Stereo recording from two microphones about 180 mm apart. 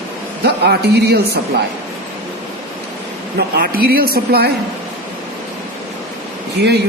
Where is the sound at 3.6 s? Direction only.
55° right (ahead or behind).